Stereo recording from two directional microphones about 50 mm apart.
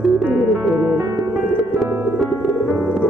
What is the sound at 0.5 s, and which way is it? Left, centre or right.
Music, centre.